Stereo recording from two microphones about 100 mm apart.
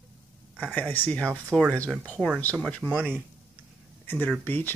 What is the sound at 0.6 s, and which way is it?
Speech, 10° left (ahead or behind).